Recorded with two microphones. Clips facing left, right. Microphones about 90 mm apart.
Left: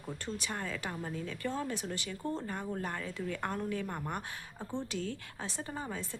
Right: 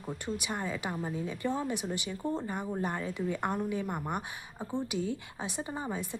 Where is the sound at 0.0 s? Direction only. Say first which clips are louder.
Right 3 dB; 15° right (ahead or behind).